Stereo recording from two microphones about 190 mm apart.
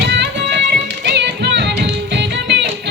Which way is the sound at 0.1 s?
65° right (ahead or behind).